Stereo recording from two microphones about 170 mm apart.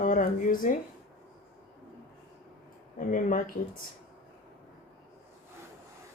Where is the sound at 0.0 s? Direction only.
50° left (ahead or behind).